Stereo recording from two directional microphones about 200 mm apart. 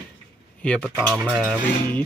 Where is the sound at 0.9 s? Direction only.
5° right (ahead or behind).